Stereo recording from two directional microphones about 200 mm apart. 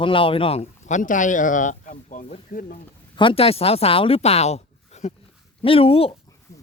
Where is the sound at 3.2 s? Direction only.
25° left (ahead or behind).